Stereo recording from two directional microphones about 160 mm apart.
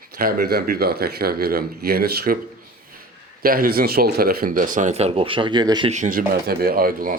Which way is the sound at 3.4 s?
65° right (ahead or behind).